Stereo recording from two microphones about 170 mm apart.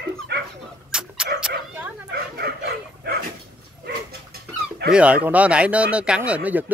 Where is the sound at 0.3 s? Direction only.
70° right (ahead or behind).